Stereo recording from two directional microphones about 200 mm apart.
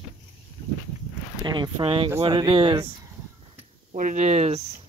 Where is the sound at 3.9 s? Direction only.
40° right (ahead or behind).